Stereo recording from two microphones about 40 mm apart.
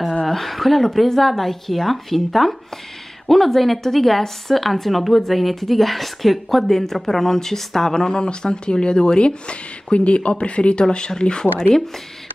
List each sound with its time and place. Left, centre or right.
0.2 s a woman's voice: centre
8.1 s speech: left